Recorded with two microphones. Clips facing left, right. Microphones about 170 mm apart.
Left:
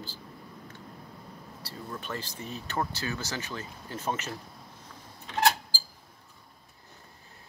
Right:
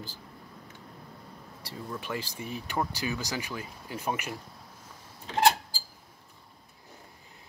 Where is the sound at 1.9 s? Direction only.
10° right (ahead or behind).